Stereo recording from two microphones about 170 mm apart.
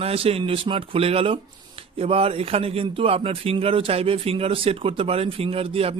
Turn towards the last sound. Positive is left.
turn(degrees=-35)  # may be behind; listen again after turning